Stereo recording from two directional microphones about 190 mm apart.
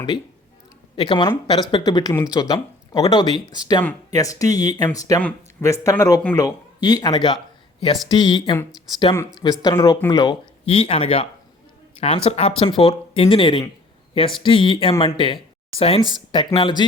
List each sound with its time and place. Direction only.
0.9 s speech: 25° left (ahead or behind)
9.4 s speech: 20° left (ahead or behind)